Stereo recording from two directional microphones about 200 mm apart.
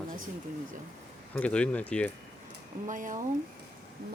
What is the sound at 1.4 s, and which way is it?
Speech, 5° left (ahead or behind).